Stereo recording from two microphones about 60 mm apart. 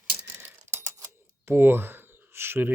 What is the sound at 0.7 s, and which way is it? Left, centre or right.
Typewriter, right.